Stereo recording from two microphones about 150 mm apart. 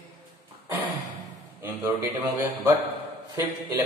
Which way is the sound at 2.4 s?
15° right (ahead or behind).